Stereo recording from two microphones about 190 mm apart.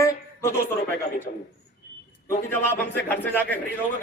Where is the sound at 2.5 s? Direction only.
10° left (ahead or behind).